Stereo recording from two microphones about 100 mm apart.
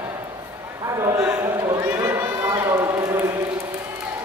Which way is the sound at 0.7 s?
30° right (ahead or behind).